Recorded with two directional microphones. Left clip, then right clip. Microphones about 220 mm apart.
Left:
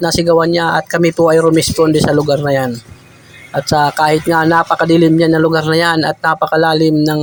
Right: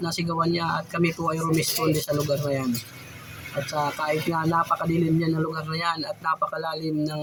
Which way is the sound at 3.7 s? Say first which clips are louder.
Left 15 dB; 40° left (ahead or behind).